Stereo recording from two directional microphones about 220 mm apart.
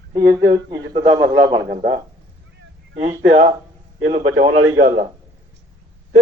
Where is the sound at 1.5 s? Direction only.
40° right (ahead or behind).